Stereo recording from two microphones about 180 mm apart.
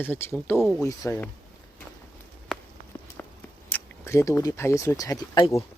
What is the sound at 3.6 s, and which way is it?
Speech, 15° left (ahead or behind).